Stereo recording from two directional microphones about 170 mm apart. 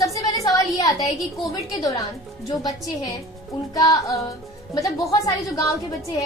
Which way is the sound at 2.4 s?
20° left (ahead or behind).